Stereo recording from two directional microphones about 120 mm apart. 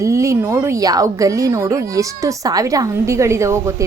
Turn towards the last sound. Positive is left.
turn(degrees=-25)  # may be behind; listen again after turning